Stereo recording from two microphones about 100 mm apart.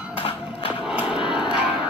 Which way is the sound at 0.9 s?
10° right (ahead or behind).